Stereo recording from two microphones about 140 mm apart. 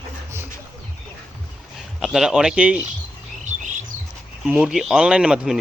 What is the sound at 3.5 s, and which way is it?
Music, 60° right (ahead or behind).